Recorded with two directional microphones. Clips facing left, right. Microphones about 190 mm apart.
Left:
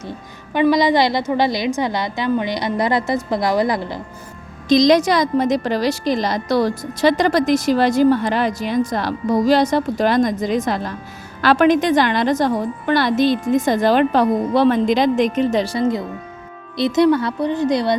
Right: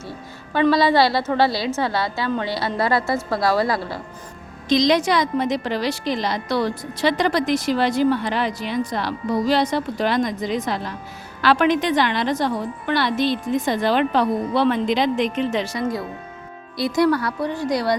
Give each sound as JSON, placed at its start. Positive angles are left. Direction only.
{"t": 0.5, "sound": "a woman's voice", "side_deg": 15}
{"t": 4.7, "sound": "a woman's voice", "side_deg": 40}